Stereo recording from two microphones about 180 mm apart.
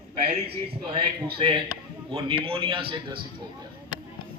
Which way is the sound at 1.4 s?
30° right (ahead or behind).